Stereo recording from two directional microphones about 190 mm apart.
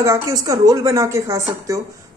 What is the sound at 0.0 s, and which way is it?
Speech, 15° right (ahead or behind).